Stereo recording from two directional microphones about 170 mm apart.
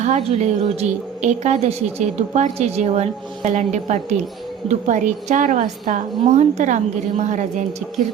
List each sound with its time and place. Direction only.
0.0 s a woman's voice: 40° right (ahead or behind)